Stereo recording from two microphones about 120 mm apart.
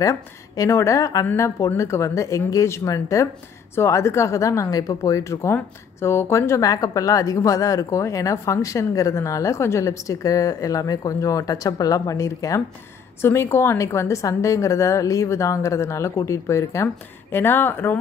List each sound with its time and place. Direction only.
0.0 s speech: 25° left (ahead or behind)